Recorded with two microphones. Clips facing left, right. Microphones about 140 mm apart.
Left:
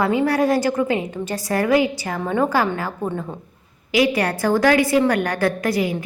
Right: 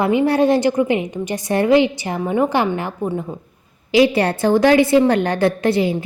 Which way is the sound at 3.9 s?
30° right (ahead or behind).